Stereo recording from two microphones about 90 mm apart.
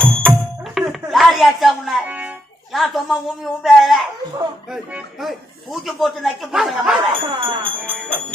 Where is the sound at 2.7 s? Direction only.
5° right (ahead or behind).